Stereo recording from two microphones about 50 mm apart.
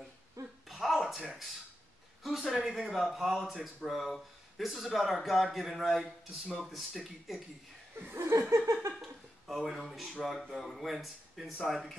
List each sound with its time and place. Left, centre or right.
0.7 s a sound: centre
2.2 s speech: centre
8.2 s laughter: right
9.5 s speech: centre